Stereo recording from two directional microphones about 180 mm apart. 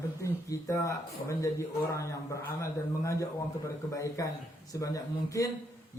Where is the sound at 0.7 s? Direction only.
15° left (ahead or behind).